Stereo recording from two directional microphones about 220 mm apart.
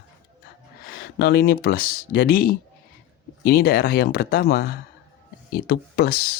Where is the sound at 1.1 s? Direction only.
45° left (ahead or behind).